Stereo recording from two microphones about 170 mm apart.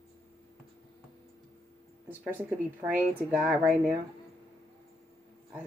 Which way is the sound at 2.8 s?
10° right (ahead or behind).